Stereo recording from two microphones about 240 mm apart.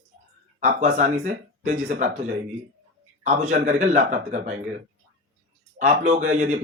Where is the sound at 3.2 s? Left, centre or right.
Right.